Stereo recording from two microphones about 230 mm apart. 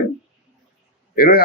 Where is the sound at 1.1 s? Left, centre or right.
Left.